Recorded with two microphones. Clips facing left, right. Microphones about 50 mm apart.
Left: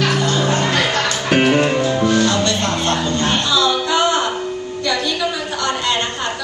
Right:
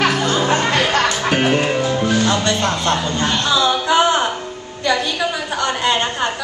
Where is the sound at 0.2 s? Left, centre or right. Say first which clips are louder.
Right 1 dB; centre.